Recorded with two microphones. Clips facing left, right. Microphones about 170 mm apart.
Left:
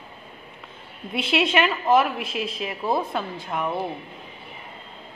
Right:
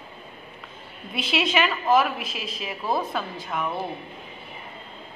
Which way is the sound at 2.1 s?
60° left (ahead or behind).